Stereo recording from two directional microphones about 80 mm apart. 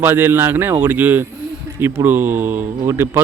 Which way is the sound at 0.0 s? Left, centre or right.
Right.